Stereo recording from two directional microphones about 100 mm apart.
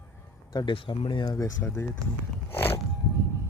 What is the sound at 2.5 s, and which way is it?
Biting, 20° left (ahead or behind).